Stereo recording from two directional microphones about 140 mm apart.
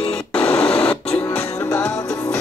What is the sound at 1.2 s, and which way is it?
Music, 20° left (ahead or behind).